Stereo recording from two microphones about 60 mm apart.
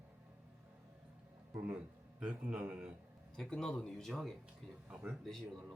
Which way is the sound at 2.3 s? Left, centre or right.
Right.